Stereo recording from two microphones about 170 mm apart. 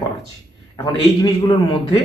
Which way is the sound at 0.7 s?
25° left (ahead or behind).